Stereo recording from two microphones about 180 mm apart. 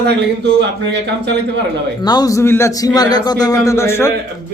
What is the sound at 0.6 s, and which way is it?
Speech, 75° right (ahead or behind).